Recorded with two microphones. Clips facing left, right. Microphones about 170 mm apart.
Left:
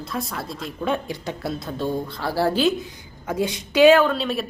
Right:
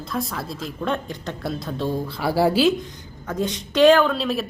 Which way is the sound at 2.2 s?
10° right (ahead or behind).